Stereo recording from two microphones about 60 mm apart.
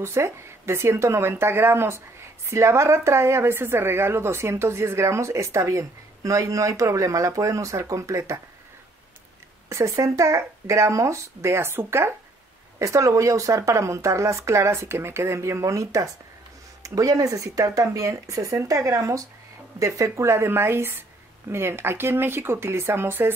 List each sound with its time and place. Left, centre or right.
0.0 s speech: right
9.7 s speech: right
12.7 s speech: right
16.8 s speech: right